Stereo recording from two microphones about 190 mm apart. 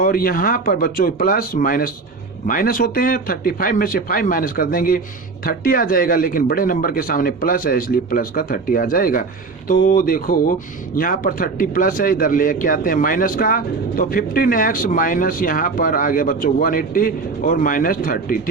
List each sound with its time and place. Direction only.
0.0 s a man's voice: 50° left (ahead or behind)